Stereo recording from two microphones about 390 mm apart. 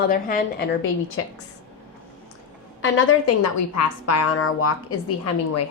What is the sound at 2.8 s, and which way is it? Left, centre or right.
Speech, left.